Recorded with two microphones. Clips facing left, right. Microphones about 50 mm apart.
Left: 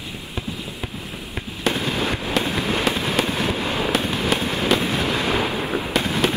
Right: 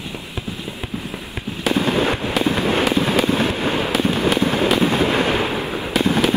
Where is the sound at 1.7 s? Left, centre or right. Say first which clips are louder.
Right 9 dB; right.